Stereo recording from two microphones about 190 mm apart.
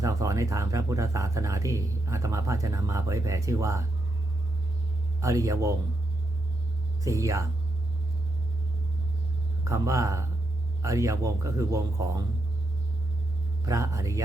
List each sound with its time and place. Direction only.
0.0 s speech: 15° right (ahead or behind)
5.2 s speech: 15° right (ahead or behind)
7.0 s speech: 15° right (ahead or behind)
9.6 s speech: 15° right (ahead or behind)
13.7 s speech: 15° right (ahead or behind)